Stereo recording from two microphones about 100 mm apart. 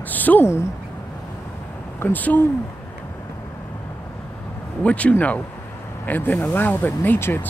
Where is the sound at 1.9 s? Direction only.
20° left (ahead or behind).